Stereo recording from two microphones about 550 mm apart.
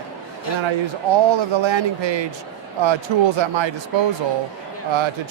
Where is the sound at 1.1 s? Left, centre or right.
Right.